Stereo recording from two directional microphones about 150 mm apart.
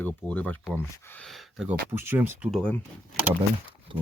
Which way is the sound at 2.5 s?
5° left (ahead or behind).